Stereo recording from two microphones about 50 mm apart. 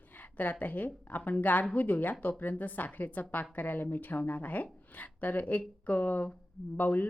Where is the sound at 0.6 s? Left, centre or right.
Left.